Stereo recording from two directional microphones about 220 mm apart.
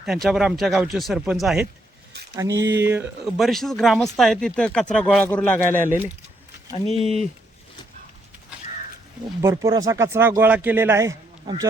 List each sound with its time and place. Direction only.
0.0 s speech: centre (ahead or behind)
2.3 s speech: 15° right (ahead or behind)
2.6 s speech: 50° right (ahead or behind)
3.3 s speech: centre (ahead or behind)
6.7 s speech: 30° left (ahead or behind)
9.4 s speech: 15° right (ahead or behind)